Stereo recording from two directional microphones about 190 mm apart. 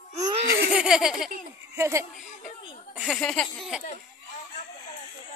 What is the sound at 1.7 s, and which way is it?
Speech, 15° right (ahead or behind).